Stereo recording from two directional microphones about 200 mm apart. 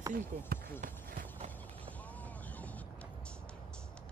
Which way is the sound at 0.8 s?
40° right (ahead or behind).